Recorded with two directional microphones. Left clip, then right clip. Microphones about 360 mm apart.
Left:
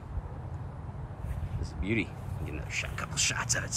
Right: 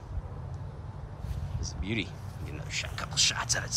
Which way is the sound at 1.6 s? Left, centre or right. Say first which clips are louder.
Left 2 dB; centre.